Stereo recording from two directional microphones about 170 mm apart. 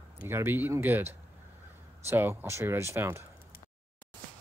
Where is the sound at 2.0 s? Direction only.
15° right (ahead or behind).